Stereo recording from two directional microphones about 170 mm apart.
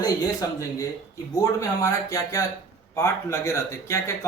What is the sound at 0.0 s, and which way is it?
Speech, 20° left (ahead or behind).